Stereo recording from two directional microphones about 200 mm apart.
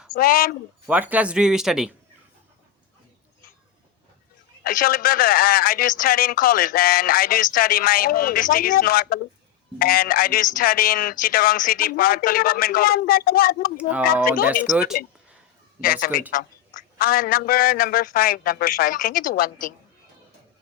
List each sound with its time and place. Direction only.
0.1 s speech: 45° left (ahead or behind)
0.9 s speech: 10° right (ahead or behind)
4.6 s speech: 45° left (ahead or behind)
13.7 s speech: 5° right (ahead or behind)
15.8 s speech: 45° left (ahead or behind)